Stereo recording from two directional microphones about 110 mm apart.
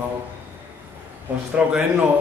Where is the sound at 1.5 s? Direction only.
10° right (ahead or behind).